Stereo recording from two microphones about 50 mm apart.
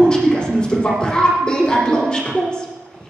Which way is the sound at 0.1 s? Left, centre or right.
Centre.